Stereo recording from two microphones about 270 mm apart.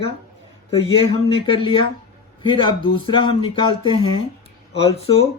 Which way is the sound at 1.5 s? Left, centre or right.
Centre.